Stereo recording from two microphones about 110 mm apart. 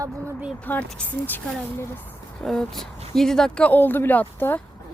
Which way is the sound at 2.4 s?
5° left (ahead or behind).